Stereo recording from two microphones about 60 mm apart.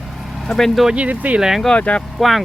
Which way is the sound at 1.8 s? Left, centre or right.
Centre.